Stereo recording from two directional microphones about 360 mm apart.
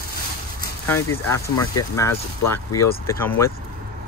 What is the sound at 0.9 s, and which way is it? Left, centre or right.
Speech, centre.